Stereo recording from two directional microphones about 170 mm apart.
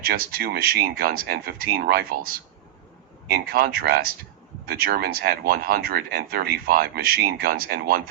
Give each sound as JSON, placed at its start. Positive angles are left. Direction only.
{"t": 0.1, "sound": "speech", "side_deg": -65}